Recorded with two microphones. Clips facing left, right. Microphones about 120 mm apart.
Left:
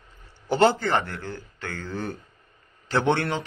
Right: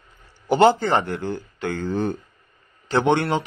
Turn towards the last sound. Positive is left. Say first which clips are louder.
# right 4 dB
turn(degrees=-15)  # may be behind; listen again after turning